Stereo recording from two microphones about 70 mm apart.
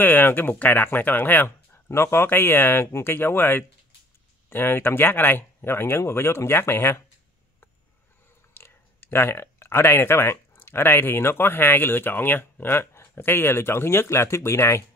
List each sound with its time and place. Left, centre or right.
0.0 s speech: left
1.9 s speech: left
8.5 s speech: left